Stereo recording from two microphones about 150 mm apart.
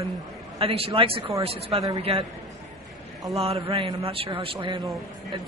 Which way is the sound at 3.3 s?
40° right (ahead or behind).